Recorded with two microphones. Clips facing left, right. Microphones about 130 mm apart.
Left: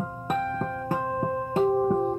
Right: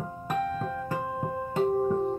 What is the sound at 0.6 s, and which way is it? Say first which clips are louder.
Music: left 3 dB; 60° left (ahead or behind).